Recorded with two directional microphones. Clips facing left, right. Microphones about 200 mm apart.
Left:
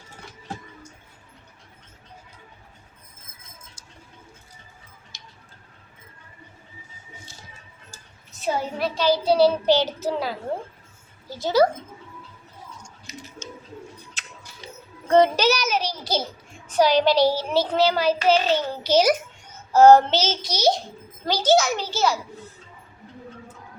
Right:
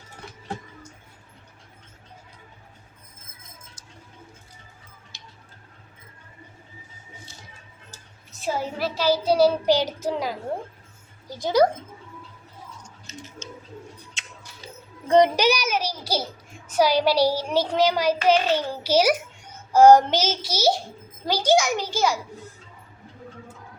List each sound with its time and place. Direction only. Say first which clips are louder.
8.4 s child singing: left 1 dB; centre (ahead or behind)
11.3 s speech: even; 15° right (ahead or behind)
12.8 s a sound: even; 10° left (ahead or behind)
15.0 s child singing: even; 15° right (ahead or behind)